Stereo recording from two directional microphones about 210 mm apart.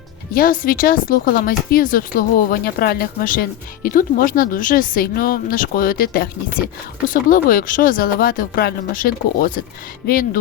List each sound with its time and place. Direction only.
0.3 s speech: 40° left (ahead or behind)